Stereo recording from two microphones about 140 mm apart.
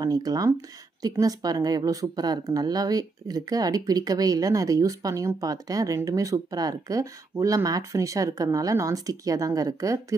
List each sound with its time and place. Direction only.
0.0 s speech: 25° right (ahead or behind)